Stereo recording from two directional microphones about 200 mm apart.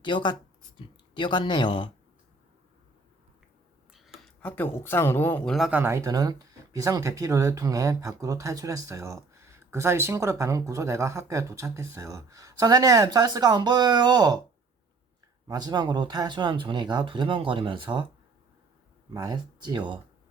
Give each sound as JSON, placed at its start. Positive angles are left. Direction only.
{"t": 0.0, "sound": "speech", "side_deg": 25}
{"t": 3.9, "sound": "speech", "side_deg": 0}
{"t": 5.5, "sound": "speech", "side_deg": -5}
{"t": 15.4, "sound": "speech", "side_deg": -20}
{"t": 19.1, "sound": "speech", "side_deg": -20}